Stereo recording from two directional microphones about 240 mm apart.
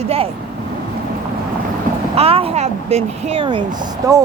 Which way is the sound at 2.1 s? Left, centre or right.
Right.